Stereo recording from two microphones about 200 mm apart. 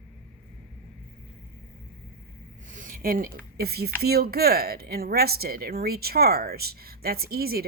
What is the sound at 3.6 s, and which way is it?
Speech, 50° right (ahead or behind).